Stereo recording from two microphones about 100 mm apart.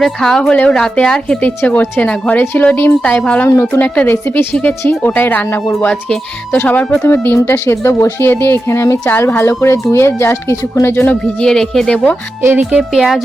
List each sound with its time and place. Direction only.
0.0 s a woman's voice: 5° left (ahead or behind)
5.9 s a woman's voice: 5° left (ahead or behind)